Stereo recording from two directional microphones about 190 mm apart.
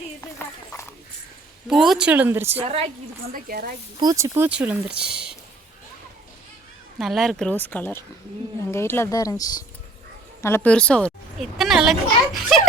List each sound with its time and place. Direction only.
0.2 s horse: 15° left (ahead or behind)
1.7 s speech: centre (ahead or behind)
2.6 s a woman's voice: 30° right (ahead or behind)
3.3 s speech: 50° right (ahead or behind)
4.0 s speech: 15° right (ahead or behind)
4.9 s speech: 60° right (ahead or behind)
7.0 s a child's voice: centre (ahead or behind)